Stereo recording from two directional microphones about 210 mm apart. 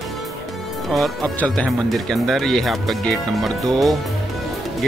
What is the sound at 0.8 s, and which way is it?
Speech, centre (ahead or behind).